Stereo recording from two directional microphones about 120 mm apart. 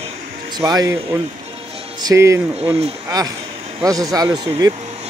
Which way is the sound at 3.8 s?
30° right (ahead or behind).